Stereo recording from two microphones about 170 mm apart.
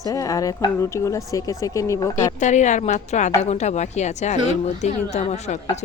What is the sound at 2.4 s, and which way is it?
A woman's voice, 45° left (ahead or behind).